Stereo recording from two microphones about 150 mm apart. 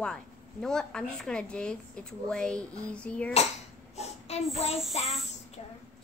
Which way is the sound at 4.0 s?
45° left (ahead or behind).